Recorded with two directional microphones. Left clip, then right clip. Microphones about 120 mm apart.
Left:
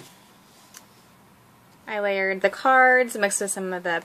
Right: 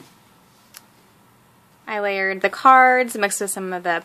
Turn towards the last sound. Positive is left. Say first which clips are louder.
# right 3 dB
turn(degrees=-30)  # may be behind; listen again after turning